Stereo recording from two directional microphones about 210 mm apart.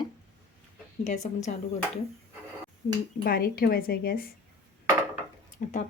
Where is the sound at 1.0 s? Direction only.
35° left (ahead or behind).